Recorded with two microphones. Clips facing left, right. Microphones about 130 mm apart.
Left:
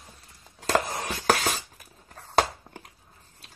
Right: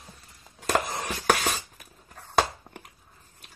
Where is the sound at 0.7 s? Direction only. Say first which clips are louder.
Left 1 dB; 35° left (ahead or behind).